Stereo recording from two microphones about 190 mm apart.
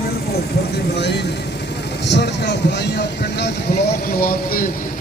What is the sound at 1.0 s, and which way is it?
Speech, 60° left (ahead or behind).